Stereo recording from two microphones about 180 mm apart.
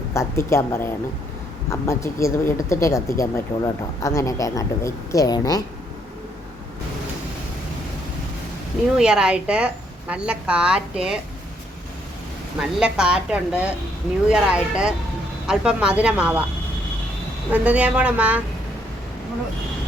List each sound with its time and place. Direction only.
0.1 s speech: 15° left (ahead or behind)
9.0 s a woman's voice: 5° right (ahead or behind)
12.5 s a woman's voice: 5° right (ahead or behind)
17.5 s speech: 10° right (ahead or behind)